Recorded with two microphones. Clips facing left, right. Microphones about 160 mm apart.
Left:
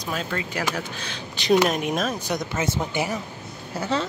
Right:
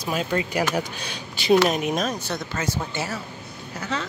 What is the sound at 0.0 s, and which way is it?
Speech, 10° right (ahead or behind).